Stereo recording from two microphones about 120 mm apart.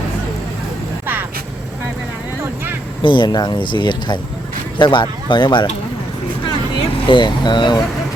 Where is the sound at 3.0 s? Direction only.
40° left (ahead or behind).